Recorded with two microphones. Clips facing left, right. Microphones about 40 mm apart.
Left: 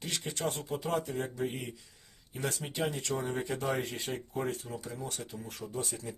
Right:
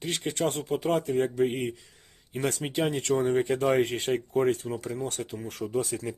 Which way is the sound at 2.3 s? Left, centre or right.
Right.